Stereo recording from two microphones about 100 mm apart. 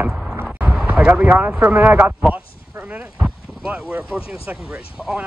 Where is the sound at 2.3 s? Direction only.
15° right (ahead or behind).